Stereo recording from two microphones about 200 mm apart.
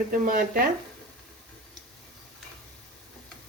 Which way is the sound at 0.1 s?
45° right (ahead or behind).